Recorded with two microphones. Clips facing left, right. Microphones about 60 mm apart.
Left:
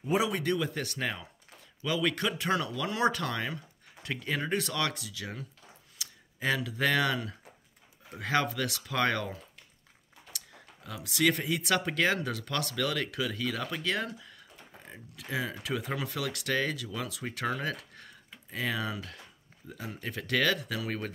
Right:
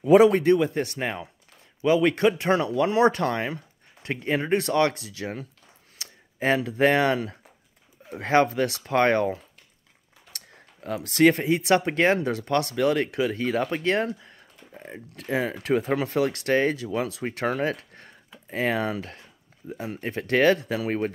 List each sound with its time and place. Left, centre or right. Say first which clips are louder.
0.2 s speech: right 12 dB; right